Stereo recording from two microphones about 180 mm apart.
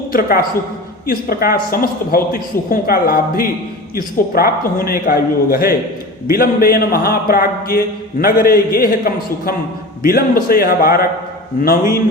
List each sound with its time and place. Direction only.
0.1 s a woman's voice: 55° left (ahead or behind)